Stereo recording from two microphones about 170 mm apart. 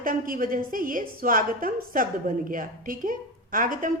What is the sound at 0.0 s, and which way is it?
A woman's voice, 55° right (ahead or behind).